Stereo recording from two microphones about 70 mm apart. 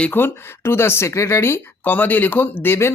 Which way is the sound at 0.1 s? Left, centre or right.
Left.